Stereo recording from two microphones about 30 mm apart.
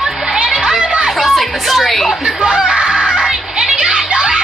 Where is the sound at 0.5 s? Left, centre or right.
Right.